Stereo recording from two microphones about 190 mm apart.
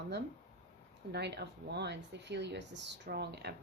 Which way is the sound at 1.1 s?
60° right (ahead or behind).